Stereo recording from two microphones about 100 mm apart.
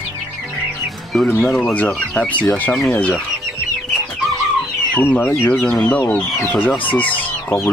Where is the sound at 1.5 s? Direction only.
10° left (ahead or behind).